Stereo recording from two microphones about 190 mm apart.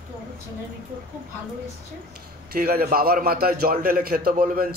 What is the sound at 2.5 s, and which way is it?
A man's voice, 50° right (ahead or behind).